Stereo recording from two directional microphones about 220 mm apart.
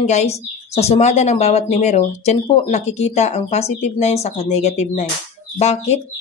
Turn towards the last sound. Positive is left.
turn(degrees=30)  # may be behind; listen again after turning